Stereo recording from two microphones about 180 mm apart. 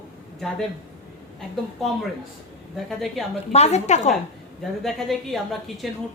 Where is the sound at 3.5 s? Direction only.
35° left (ahead or behind).